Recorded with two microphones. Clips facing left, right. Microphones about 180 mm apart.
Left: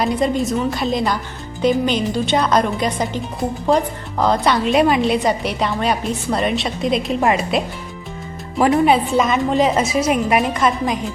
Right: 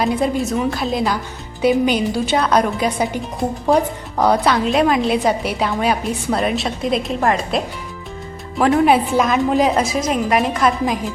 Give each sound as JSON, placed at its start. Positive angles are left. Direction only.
{"t": 0.0, "sound": "a woman's voice", "side_deg": 0}
{"t": 4.5, "sound": "a woman's voice", "side_deg": 0}